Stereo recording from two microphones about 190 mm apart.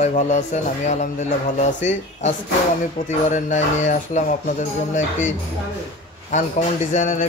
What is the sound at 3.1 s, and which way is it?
Speech, 40° left (ahead or behind).